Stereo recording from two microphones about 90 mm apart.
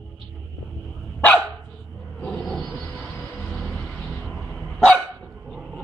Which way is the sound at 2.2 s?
10° left (ahead or behind).